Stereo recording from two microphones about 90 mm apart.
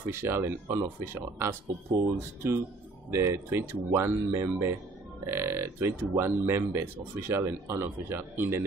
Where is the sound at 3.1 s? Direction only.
30° right (ahead or behind).